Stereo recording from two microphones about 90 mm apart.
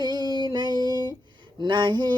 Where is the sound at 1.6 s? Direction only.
60° right (ahead or behind).